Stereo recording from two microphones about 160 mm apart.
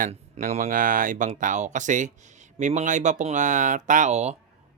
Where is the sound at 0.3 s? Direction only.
50° right (ahead or behind).